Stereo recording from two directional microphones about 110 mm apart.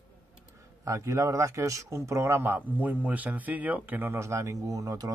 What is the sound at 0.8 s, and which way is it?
Speech, 30° right (ahead or behind).